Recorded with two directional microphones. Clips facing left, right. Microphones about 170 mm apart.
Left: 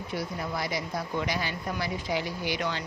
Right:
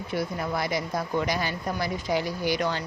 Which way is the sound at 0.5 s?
50° right (ahead or behind).